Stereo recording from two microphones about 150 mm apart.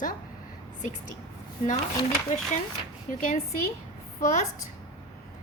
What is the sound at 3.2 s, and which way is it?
A woman's voice, 60° left (ahead or behind).